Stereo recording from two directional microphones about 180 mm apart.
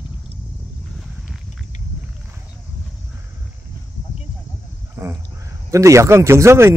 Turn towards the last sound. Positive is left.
turn(degrees=-15)  # may be behind; listen again after turning